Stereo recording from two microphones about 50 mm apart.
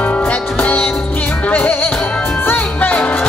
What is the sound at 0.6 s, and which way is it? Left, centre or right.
Music, left.